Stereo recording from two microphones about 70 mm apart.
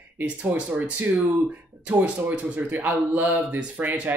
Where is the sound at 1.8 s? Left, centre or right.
Centre.